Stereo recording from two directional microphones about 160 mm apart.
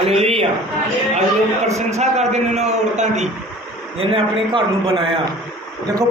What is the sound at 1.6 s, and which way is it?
A man's voice, 45° right (ahead or behind).